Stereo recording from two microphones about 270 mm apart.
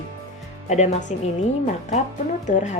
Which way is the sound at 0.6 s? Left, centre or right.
Left.